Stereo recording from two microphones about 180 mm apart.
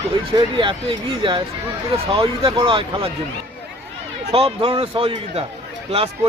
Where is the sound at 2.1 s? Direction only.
30° right (ahead or behind).